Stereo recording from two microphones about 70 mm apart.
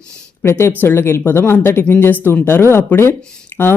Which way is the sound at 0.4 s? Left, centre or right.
Left.